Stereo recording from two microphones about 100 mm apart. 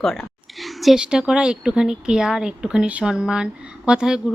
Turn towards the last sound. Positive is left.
turn(degrees=-10)  # may be behind; listen again after turning